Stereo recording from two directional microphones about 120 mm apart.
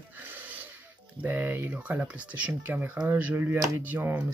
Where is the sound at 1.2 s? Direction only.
15° right (ahead or behind).